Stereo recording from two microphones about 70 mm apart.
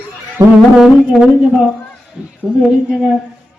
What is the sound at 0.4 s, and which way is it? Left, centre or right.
Music, right.